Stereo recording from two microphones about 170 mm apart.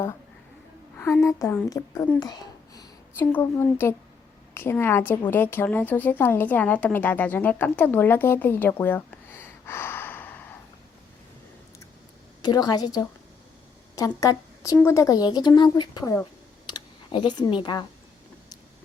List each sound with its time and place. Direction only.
0.9 s a woman's voice: 15° left (ahead or behind)
3.2 s a woman's voice: 10° left (ahead or behind)
12.4 s speech: 25° left (ahead or behind)
14.2 s a woman's voice: 20° left (ahead or behind)